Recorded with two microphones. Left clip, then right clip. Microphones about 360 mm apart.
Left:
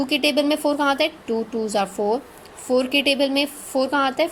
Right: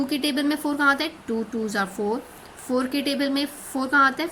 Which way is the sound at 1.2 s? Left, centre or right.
Left.